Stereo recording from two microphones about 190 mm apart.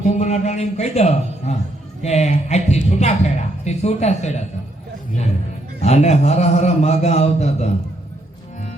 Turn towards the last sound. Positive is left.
turn(degrees=35)  # may be behind; listen again after turning